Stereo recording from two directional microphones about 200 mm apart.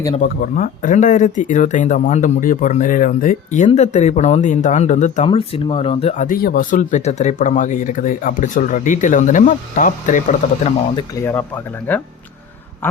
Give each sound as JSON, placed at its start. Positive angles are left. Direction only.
{"t": 0.2, "sound": "speech", "side_deg": 40}
{"t": 5.2, "sound": "speech", "side_deg": 25}
{"t": 10.9, "sound": "speech", "side_deg": 10}
{"t": 12.8, "sound": "a sound", "side_deg": 10}